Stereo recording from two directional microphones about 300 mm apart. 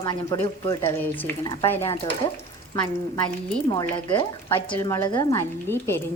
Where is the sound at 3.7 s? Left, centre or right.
Centre.